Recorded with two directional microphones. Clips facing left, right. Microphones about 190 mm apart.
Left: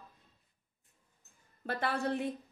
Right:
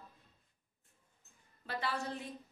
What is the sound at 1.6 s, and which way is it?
Speech, 55° left (ahead or behind).